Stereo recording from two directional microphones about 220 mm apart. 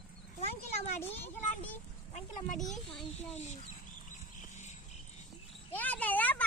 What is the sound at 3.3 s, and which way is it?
Speech, 30° left (ahead or behind).